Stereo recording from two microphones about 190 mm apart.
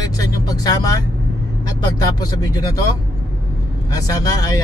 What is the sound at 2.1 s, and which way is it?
Speech, 20° left (ahead or behind).